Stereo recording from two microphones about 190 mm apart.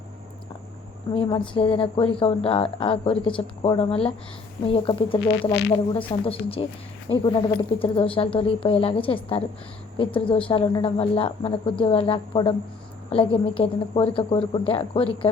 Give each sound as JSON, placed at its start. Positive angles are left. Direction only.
{"t": 1.1, "sound": "a woman's voice", "side_deg": 25}